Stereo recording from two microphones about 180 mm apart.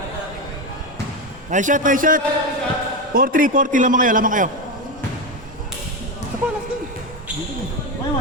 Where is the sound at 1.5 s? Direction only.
45° right (ahead or behind).